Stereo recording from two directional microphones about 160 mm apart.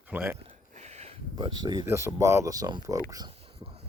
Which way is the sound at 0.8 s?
45° right (ahead or behind).